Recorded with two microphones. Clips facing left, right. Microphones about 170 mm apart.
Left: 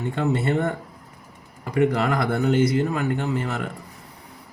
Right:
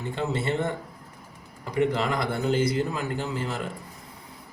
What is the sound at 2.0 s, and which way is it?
Speech, 60° left (ahead or behind).